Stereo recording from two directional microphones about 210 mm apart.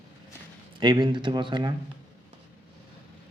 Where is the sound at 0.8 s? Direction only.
20° right (ahead or behind).